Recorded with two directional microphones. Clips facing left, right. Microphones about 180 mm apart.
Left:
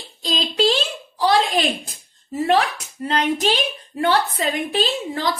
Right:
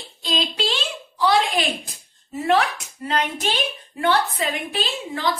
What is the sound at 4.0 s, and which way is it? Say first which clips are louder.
Speech: left 1 dB; 35° left (ahead or behind).